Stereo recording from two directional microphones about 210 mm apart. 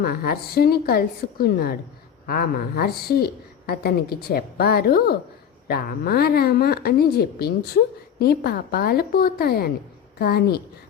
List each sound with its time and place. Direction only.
0.0 s a woman's voice: 45° left (ahead or behind)